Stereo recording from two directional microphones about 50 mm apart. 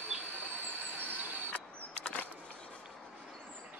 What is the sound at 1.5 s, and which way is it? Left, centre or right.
Mechanisms, left.